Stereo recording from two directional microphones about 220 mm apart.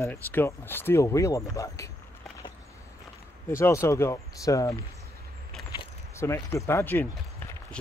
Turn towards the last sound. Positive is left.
turn(degrees=10)  # may be behind; listen again after turning